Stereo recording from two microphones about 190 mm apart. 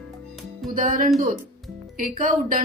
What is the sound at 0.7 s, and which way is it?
Speech, 45° right (ahead or behind).